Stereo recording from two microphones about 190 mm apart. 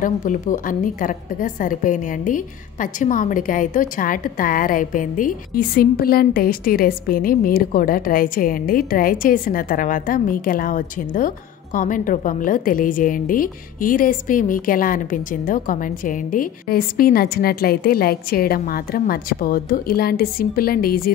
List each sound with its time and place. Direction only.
0.0 s a woman's voice: 45° left (ahead or behind)